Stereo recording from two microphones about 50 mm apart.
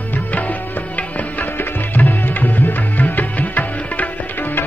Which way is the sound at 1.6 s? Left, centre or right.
Left.